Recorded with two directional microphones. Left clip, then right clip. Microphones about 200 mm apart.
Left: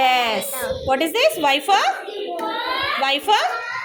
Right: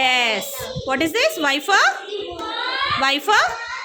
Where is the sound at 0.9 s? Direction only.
20° right (ahead or behind).